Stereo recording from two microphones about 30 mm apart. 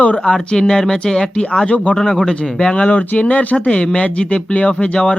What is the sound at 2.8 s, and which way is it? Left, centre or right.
Speech, left.